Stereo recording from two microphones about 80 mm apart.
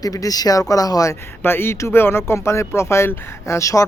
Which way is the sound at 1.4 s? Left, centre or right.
Left.